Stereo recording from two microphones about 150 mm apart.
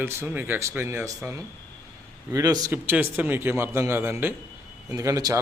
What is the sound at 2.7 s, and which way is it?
A man's voice, 15° right (ahead or behind).